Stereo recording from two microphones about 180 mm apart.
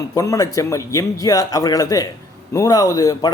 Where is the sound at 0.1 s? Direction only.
15° left (ahead or behind).